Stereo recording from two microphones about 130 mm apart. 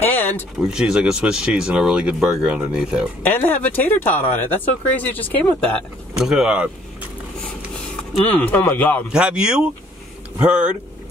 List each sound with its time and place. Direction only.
0.0 s a sound: 15° left (ahead or behind)
0.7 s speech: 5° right (ahead or behind)
3.3 s speech: 15° left (ahead or behind)
6.1 s speech: 5° right (ahead or behind)
8.3 s speech: 15° left (ahead or behind)
9.1 s speech: 5° right (ahead or behind)